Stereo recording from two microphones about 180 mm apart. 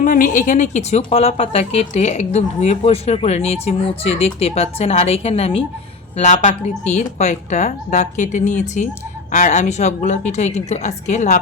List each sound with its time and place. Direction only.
0.0 s speech: 45° left (ahead or behind)